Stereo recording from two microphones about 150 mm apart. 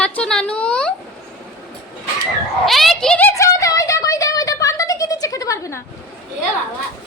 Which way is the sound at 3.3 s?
20° left (ahead or behind).